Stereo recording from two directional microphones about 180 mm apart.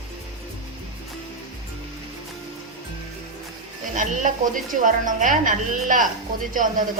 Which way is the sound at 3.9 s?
45° right (ahead or behind).